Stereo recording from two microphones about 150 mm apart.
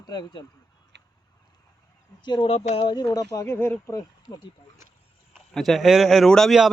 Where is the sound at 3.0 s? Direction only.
25° left (ahead or behind).